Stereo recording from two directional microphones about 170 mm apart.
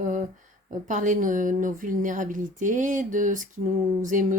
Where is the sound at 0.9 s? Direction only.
50° right (ahead or behind).